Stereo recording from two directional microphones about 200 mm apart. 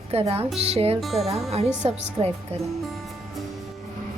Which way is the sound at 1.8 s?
30° right (ahead or behind).